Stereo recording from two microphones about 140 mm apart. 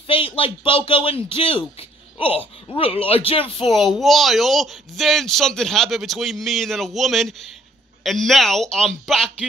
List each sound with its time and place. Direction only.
0.4 s a man's voice: 40° left (ahead or behind)
4.0 s speech: centre (ahead or behind)